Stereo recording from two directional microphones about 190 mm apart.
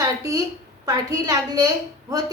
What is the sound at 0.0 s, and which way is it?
A woman's voice, 20° right (ahead or behind).